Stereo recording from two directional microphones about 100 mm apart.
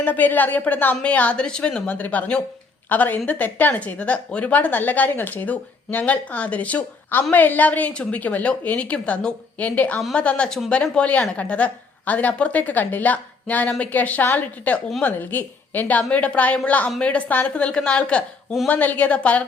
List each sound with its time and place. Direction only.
0.0 s a woman's voice: 15° left (ahead or behind)